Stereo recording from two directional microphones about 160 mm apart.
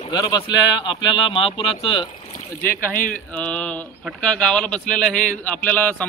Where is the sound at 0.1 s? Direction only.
25° left (ahead or behind).